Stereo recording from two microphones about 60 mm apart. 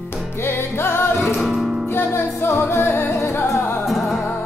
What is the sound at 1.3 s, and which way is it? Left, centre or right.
Music, centre.